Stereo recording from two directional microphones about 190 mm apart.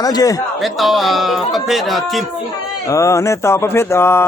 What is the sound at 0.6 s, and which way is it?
Speech, centre (ahead or behind).